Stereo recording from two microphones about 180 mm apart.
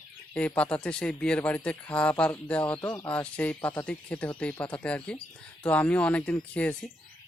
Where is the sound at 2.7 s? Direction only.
25° left (ahead or behind).